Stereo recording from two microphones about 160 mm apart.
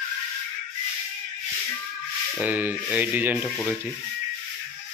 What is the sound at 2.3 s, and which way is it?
Speech, 10° right (ahead or behind).